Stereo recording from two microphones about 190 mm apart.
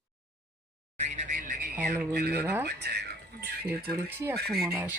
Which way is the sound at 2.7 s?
60° right (ahead or behind).